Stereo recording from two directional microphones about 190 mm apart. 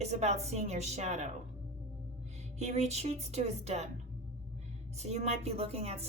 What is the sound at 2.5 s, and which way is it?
A woman's voice, 35° right (ahead or behind).